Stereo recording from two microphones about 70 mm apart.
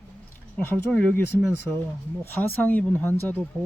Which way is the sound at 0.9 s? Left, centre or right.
Left.